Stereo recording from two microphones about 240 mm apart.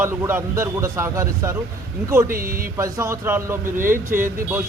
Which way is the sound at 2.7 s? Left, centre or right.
Centre.